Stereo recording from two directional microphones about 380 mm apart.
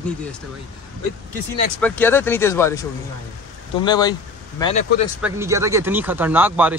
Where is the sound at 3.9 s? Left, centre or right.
Centre.